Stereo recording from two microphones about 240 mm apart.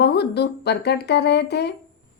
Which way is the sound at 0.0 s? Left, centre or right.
Left.